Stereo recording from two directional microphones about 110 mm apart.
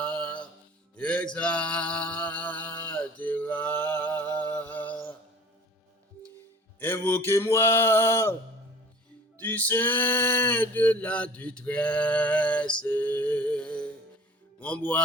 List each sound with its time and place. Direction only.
0.0 s music: 10° left (ahead or behind)
0.9 s mantra: 10° left (ahead or behind)
6.7 s a sound: 20° left (ahead or behind)
9.4 s male singing: 15° left (ahead or behind)
12.8 s music: 15° left (ahead or behind)
14.6 s speech: 15° left (ahead or behind)